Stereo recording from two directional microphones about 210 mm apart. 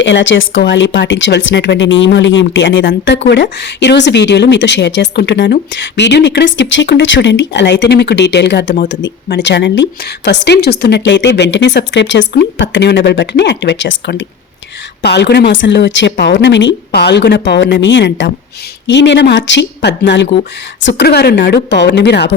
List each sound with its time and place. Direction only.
0.0 s a woman's voice: 60° left (ahead or behind)